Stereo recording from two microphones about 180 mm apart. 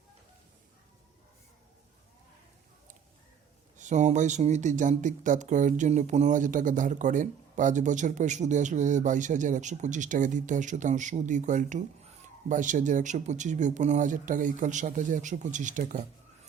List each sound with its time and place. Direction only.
3.8 s speech: 40° right (ahead or behind)